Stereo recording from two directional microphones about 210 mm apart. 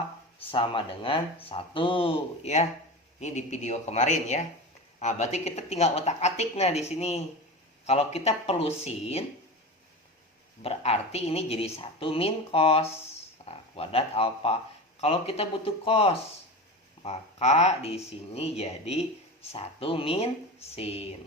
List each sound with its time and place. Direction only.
0.5 s a woman's voice: 25° left (ahead or behind)
10.6 s speech: 30° left (ahead or behind)